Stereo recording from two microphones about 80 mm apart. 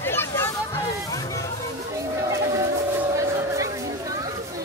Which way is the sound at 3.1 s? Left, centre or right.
Right.